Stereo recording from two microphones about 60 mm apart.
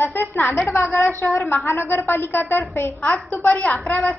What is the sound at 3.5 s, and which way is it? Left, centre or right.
Speech, left.